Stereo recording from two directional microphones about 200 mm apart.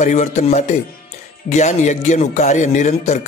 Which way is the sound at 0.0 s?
35° left (ahead or behind).